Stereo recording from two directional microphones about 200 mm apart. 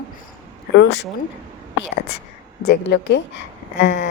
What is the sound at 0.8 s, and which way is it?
Speech, 60° left (ahead or behind).